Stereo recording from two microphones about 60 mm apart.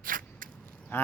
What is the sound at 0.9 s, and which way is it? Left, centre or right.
Duck, left.